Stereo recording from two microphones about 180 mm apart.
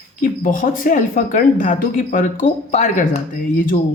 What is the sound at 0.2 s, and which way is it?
Speech, 50° left (ahead or behind).